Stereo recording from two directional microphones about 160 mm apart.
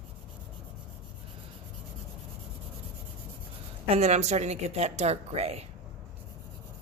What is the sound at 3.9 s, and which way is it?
A woman's voice, 45° right (ahead or behind).